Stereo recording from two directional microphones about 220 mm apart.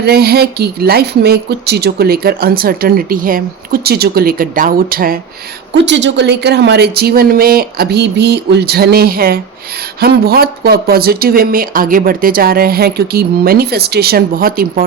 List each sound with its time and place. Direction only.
0.0 s speech: 45° right (ahead or behind)
5.7 s speech: 55° right (ahead or behind)